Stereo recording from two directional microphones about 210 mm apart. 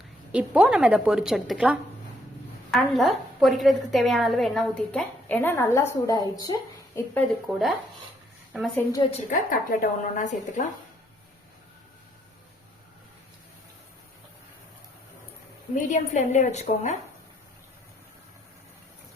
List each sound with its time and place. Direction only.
0.3 s a woman's voice: 5° right (ahead or behind)
8.9 s a woman's voice: 20° left (ahead or behind)
9.3 s speech: 40° left (ahead or behind)
15.7 s speech: 35° left (ahead or behind)